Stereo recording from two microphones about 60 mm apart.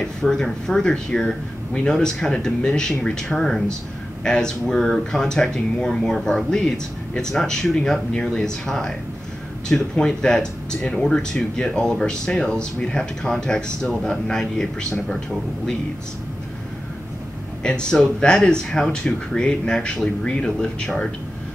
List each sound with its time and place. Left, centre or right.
0.0 s speech: centre
17.6 s speech: centre